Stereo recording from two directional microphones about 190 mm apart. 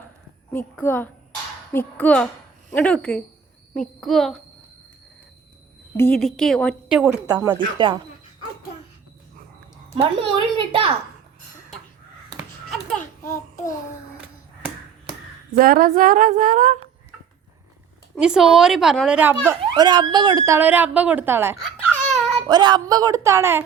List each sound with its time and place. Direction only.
0.5 s a woman's voice: 10° left (ahead or behind)
6.1 s a woman's voice: centre (ahead or behind)
7.1 s a woman's voice: 15° right (ahead or behind)
9.9 s a woman's voice: 30° right (ahead or behind)
12.4 s a sound: centre (ahead or behind)
15.5 s a woman's voice: 50° right (ahead or behind)
18.2 s speech: 5° right (ahead or behind)
21.5 s babbling: centre (ahead or behind)
22.4 s a woman's voice: 20° right (ahead or behind)